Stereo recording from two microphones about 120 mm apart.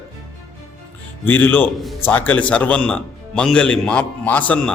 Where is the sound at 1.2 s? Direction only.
15° left (ahead or behind).